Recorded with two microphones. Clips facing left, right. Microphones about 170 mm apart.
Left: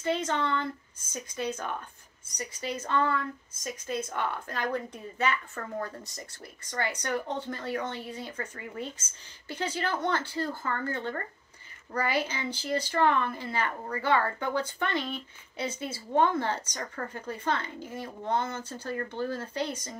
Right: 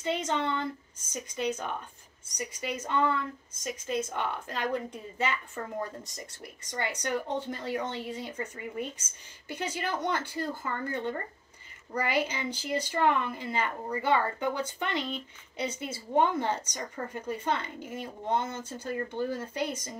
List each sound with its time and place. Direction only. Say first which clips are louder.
0.0 s speech: left 1 dB; 20° right (ahead or behind)